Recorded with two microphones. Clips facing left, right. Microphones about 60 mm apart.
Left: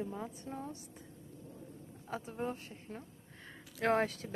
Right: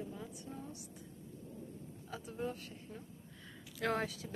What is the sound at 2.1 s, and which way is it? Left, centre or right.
A woman's voice, left.